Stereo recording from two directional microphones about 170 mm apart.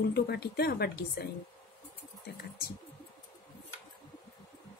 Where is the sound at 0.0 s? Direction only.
70° left (ahead or behind).